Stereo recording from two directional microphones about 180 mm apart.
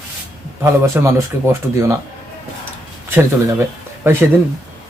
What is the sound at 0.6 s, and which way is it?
Speech, 15° right (ahead or behind).